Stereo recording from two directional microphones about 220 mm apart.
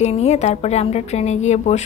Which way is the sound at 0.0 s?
30° left (ahead or behind).